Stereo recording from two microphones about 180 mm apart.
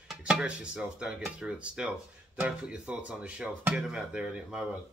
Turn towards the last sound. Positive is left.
turn(degrees=-5)  # may be behind; listen again after turning